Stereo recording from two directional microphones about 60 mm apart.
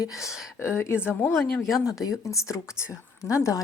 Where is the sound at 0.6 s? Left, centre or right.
Left.